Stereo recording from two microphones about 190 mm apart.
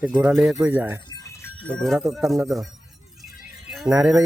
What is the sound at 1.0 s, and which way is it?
Speech, 15° left (ahead or behind).